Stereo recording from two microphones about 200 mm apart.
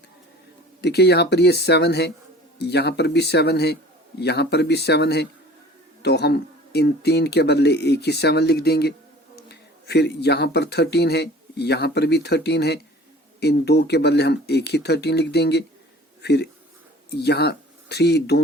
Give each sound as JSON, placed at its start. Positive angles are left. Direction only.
{"t": 0.8, "sound": "speech", "side_deg": 55}